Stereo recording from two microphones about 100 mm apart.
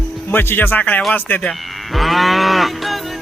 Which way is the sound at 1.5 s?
Centre (ahead or behind).